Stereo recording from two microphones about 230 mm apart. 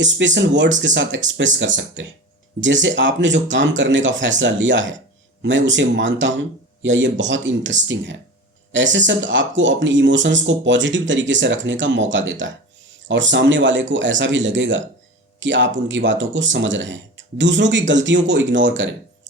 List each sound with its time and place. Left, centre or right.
0.0 s speech: right
8.7 s speech: right